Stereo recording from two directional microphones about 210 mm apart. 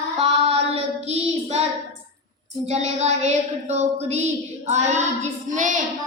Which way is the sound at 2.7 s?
30° right (ahead or behind).